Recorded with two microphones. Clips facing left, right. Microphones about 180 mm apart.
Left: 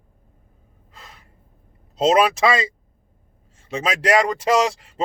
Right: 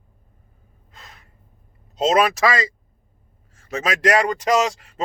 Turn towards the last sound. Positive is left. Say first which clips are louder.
# left 1 dB
turn(degrees=30)  # may be behind; listen again after turning